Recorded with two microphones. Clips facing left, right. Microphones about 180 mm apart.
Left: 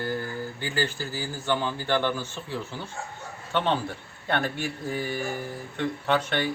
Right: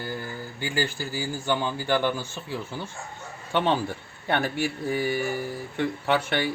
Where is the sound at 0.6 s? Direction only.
10° right (ahead or behind).